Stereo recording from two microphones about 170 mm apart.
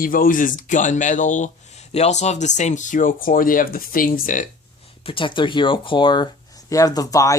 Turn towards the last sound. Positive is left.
turn(degrees=20)  # may be behind; listen again after turning